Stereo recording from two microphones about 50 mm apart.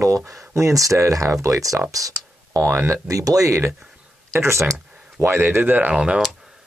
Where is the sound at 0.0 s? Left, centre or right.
Right.